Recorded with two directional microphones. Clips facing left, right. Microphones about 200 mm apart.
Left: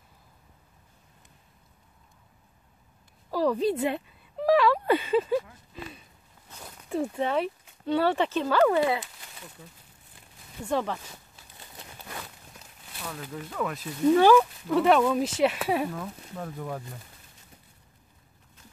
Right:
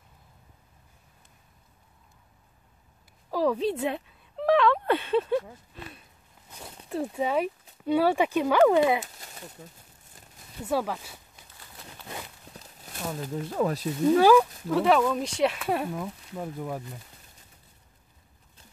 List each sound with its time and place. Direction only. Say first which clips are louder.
3.3 s a sound: left 1 dB; centre (ahead or behind)
6.9 s speech: even; 5° right (ahead or behind)
9.0 s a sound: right 3 dB; 40° right (ahead or behind)
10.7 s speech: even; 5° right (ahead or behind)
12.5 s clip-clop: right 4 dB; 40° right (ahead or behind)
13.3 s speech: right 5 dB; 30° right (ahead or behind)
14.1 s speech: even; 5° right (ahead or behind)
16.0 s speech: right 2 dB; 10° right (ahead or behind)